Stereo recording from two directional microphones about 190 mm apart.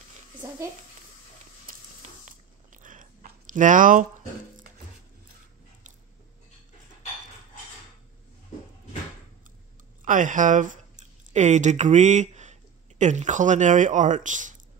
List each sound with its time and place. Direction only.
1.7 s a sound: 45° right (ahead or behind)
2.2 s chewing: 45° right (ahead or behind)
10.0 s speech: 40° right (ahead or behind)